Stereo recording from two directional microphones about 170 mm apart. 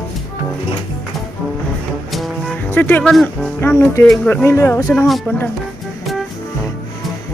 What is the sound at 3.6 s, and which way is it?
Speech, 15° left (ahead or behind).